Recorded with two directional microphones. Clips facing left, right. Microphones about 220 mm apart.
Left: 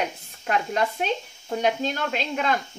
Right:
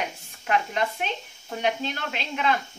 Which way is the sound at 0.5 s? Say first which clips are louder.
Left 1 dB; 40° left (ahead or behind).